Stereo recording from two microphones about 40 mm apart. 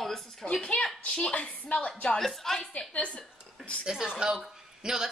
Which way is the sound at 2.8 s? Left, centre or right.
Left.